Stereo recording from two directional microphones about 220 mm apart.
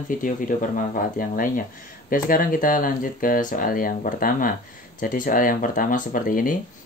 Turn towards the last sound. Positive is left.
turn(degrees=40)  # may be behind; listen again after turning